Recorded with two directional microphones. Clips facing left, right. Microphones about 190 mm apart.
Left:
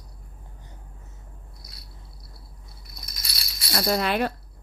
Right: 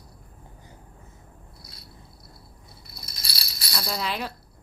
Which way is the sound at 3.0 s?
30° right (ahead or behind).